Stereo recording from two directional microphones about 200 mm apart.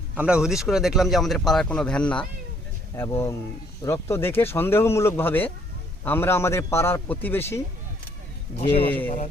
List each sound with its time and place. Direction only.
0.2 s speech: 5° right (ahead or behind); by 7.6 s 10° left (ahead or behind)
8.5 s speech: 30° left (ahead or behind)